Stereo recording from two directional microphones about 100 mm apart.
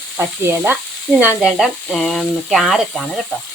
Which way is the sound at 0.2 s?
25° right (ahead or behind).